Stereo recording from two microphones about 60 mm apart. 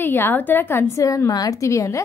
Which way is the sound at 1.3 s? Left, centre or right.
Left.